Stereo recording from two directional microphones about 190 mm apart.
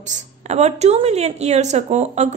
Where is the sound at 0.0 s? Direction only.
40° right (ahead or behind).